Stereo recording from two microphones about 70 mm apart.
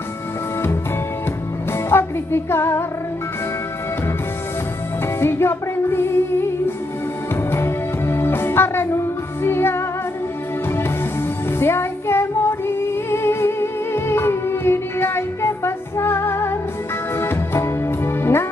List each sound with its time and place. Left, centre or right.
1.7 s music: left
5.2 s music: left
11.6 s female singing: left
17.2 s music: left